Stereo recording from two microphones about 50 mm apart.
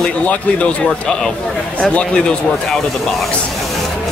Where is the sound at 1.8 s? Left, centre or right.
Left.